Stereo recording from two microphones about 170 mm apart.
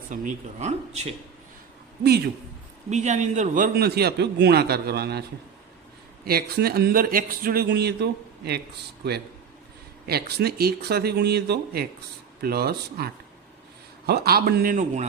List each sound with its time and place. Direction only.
0.1 s speech: 45° right (ahead or behind)
2.9 s a man's voice: 45° right (ahead or behind); by 5.2 s 70° right (ahead or behind)
6.2 s speech: 65° right (ahead or behind)
10.1 s a man's voice: 70° right (ahead or behind)
14.1 s speech: 65° right (ahead or behind); by 15.0 s 50° right (ahead or behind)